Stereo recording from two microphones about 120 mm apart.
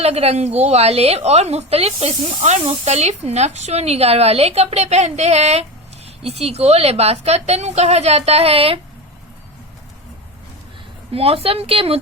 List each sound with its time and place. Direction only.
0.0 s a woman's voice: 60° right (ahead or behind)
11.1 s a woman's voice: 50° right (ahead or behind)